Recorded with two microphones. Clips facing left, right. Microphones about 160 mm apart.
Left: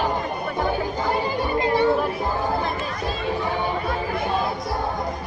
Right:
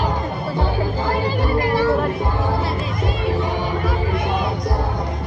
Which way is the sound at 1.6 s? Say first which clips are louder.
Even; 25° left (ahead or behind).